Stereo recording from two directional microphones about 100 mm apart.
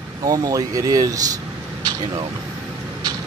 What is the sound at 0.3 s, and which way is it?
Speech, 35° right (ahead or behind).